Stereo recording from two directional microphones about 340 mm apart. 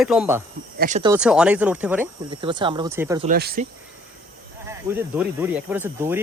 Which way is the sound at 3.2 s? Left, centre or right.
Right.